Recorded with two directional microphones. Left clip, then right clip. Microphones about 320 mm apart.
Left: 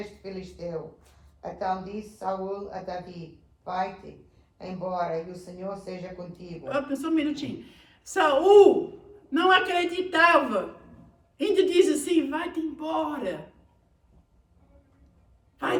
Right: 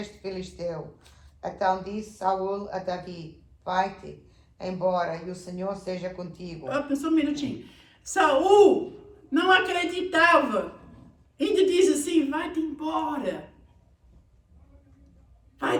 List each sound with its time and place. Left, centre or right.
1.4 s a woman's voice: right
6.7 s a woman's voice: centre
15.6 s speech: centre